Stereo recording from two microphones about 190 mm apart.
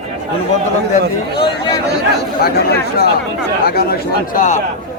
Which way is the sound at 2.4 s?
55° left (ahead or behind).